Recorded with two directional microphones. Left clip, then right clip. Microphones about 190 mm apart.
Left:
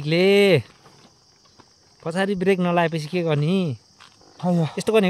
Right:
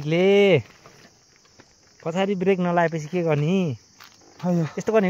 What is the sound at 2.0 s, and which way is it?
Speech, 5° left (ahead or behind).